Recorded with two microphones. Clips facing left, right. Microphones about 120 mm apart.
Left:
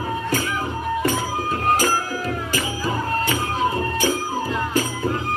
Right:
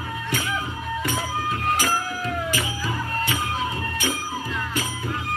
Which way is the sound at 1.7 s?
40° left (ahead or behind).